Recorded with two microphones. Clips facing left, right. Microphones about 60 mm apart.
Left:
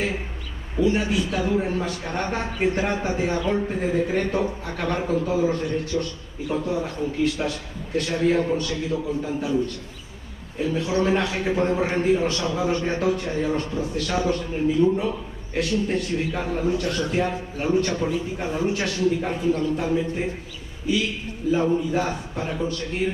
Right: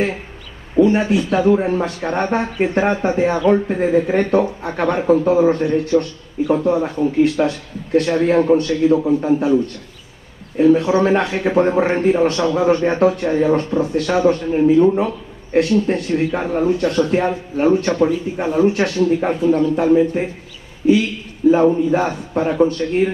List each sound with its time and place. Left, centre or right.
0.7 s a man's voice: right
10.6 s a man's voice: right
21.5 s a man's voice: right